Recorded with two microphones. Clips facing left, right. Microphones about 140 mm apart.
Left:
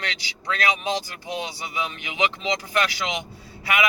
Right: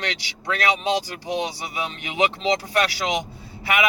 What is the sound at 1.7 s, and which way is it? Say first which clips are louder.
Speech: right 1 dB; 35° right (ahead or behind).